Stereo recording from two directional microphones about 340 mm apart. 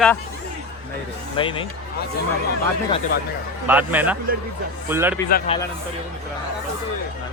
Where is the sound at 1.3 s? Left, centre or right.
Centre.